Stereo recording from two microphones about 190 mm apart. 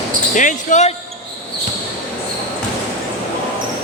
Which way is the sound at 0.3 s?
40° left (ahead or behind).